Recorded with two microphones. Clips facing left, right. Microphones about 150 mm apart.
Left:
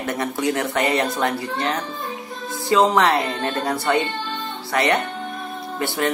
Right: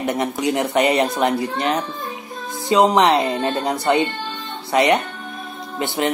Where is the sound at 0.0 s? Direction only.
20° right (ahead or behind).